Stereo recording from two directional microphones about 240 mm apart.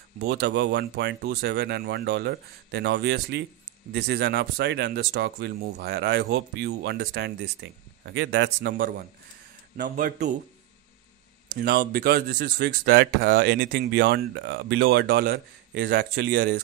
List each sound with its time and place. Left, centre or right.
0.2 s speech: right
11.5 s speech: right